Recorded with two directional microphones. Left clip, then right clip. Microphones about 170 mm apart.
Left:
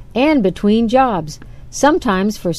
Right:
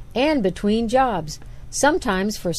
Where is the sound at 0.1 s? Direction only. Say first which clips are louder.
Left 5 dB; centre (ahead or behind).